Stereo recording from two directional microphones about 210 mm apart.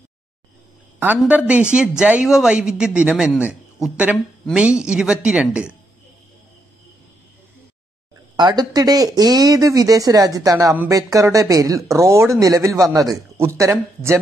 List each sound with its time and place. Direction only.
0.9 s a woman's voice: 10° right (ahead or behind)
8.4 s speech: 20° right (ahead or behind)